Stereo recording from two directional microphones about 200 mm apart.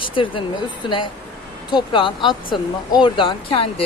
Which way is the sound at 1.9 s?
25° left (ahead or behind).